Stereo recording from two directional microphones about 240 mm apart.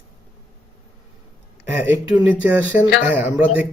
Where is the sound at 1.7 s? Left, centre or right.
Centre.